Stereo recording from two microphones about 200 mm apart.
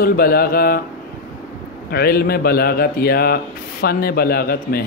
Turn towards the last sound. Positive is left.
turn(degrees=50)  # may be behind; listen again after turning